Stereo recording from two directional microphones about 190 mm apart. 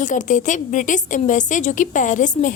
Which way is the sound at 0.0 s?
40° left (ahead or behind).